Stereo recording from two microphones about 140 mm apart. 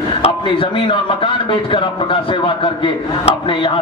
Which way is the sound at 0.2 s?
40° left (ahead or behind).